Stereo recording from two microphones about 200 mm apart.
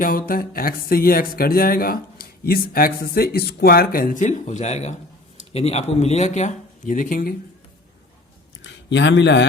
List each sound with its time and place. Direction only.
0.0 s speech: 45° left (ahead or behind)
8.6 s speech: 65° left (ahead or behind)